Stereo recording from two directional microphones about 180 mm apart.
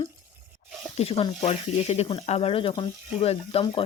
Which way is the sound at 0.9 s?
35° left (ahead or behind).